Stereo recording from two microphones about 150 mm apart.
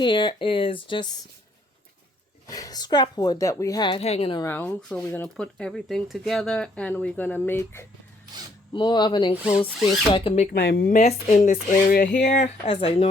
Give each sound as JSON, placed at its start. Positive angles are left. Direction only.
{"t": 0.0, "sound": "speech", "side_deg": 30}
{"t": 2.5, "sound": "speech", "side_deg": 25}
{"t": 4.0, "sound": "speech", "side_deg": 40}
{"t": 4.4, "sound": "speech", "side_deg": 10}
{"t": 8.7, "sound": "speech", "side_deg": 30}
{"t": 10.5, "sound": "speech", "side_deg": 90}
{"t": 11.0, "sound": "speech", "side_deg": 45}
{"t": 11.9, "sound": "speech", "side_deg": 70}
{"t": 12.6, "sound": "speech", "side_deg": 35}